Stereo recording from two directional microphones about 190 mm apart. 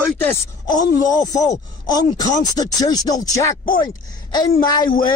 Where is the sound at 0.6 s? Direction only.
20° left (ahead or behind).